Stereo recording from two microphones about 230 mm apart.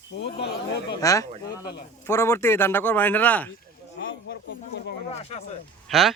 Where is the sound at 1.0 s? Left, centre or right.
Centre.